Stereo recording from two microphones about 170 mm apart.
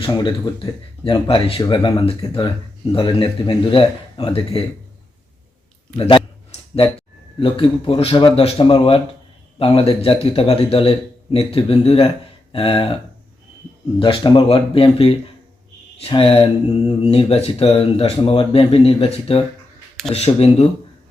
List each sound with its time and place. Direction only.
0.0 s speech: 25° left (ahead or behind)
6.0 s a sound: 35° left (ahead or behind)
7.3 s speech: 30° left (ahead or behind)
14.0 s speech: 30° left (ahead or behind)